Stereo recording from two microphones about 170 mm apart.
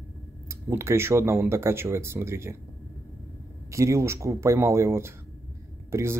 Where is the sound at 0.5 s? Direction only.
15° right (ahead or behind).